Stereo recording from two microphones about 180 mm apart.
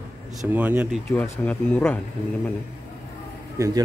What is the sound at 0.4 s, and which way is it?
Speech, 10° right (ahead or behind).